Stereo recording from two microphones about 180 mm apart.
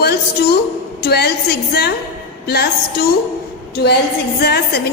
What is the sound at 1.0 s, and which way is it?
A woman's voice, 65° left (ahead or behind).